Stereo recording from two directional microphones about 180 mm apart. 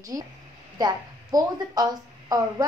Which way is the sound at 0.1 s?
15° right (ahead or behind).